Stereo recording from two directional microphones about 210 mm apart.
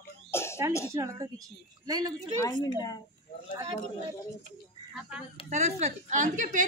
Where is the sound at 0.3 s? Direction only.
10° left (ahead or behind).